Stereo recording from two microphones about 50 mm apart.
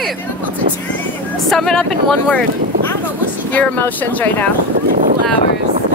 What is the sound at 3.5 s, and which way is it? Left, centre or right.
Speech, left.